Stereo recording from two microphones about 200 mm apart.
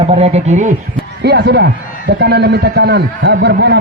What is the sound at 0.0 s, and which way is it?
Speech, 30° right (ahead or behind).